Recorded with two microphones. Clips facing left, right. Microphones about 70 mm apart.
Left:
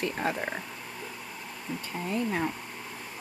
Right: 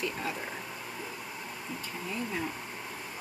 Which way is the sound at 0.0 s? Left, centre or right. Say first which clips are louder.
Left 5 dB; left.